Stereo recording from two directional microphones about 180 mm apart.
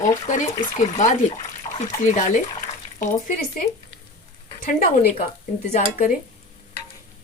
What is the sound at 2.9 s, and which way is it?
Speech, 55° left (ahead or behind).